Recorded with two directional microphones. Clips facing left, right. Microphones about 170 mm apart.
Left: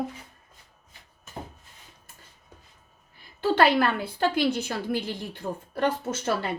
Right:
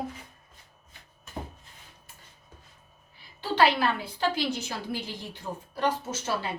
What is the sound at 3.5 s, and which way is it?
A woman's voice, 55° left (ahead or behind).